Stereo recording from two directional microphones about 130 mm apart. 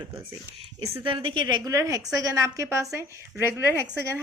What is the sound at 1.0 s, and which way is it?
A woman's voice, 40° right (ahead or behind).